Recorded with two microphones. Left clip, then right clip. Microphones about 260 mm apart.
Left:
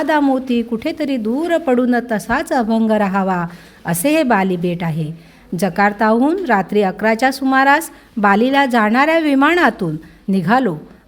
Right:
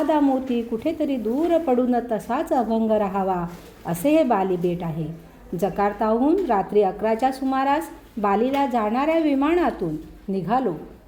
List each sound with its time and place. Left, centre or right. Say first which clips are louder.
0.1 s a woman's voice: left 5 dB; left